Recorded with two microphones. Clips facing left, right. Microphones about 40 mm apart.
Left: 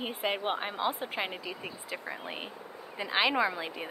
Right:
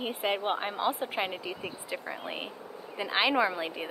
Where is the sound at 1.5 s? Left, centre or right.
Centre.